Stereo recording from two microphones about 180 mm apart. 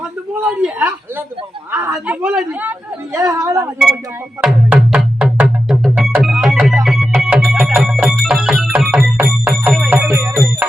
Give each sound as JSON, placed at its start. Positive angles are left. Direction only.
{"t": 0.3, "sound": "a man's voice", "side_deg": -10}
{"t": 4.4, "sound": "music", "side_deg": -10}